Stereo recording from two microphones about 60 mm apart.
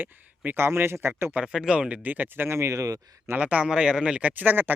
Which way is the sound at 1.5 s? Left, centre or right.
Centre.